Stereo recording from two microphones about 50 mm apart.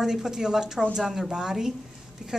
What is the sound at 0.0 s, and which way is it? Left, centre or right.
A woman's voice, centre.